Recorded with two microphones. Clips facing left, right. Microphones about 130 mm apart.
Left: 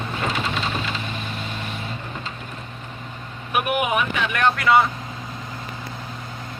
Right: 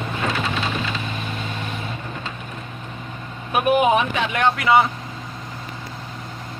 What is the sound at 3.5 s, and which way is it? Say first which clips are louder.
Speech: right 5 dB; 30° right (ahead or behind).